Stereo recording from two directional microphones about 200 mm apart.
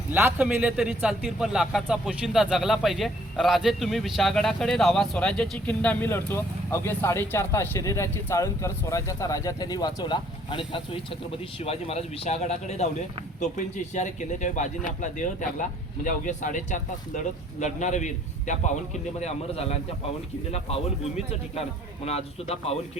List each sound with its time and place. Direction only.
0.1 s a man's voice: 10° right (ahead or behind); by 19.8 s 35° left (ahead or behind)
22.0 s speech: 30° left (ahead or behind)